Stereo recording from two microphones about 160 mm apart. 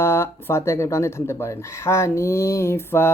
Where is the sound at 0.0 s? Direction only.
15° left (ahead or behind).